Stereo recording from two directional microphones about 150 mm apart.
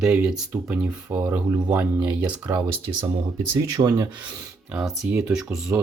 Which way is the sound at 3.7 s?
30° right (ahead or behind).